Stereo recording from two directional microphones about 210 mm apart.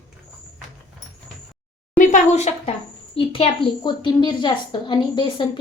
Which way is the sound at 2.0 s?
35° left (ahead or behind).